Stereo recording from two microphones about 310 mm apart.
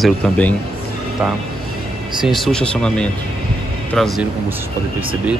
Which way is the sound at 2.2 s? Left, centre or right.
Centre.